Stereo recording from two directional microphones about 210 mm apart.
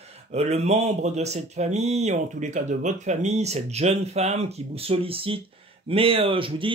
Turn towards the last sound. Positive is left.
turn(degrees=-25)  # may be behind; listen again after turning